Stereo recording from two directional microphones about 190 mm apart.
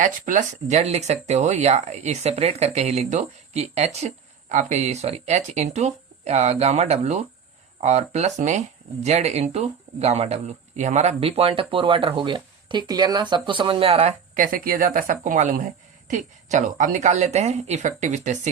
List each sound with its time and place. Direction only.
0.0 s speech: 40° right (ahead or behind)